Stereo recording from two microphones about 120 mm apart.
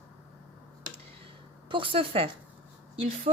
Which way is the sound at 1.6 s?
45° right (ahead or behind).